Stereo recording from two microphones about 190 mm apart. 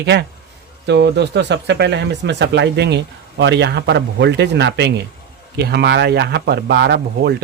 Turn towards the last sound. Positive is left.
turn(degrees=-60)  # may be behind; listen again after turning